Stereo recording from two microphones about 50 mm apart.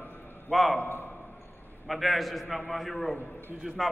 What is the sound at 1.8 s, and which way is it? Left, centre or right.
A man's voice, centre.